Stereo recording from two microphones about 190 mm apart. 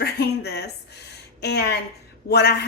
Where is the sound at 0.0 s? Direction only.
60° left (ahead or behind).